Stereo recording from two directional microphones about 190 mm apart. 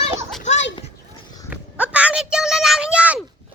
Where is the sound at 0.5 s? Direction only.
35° left (ahead or behind).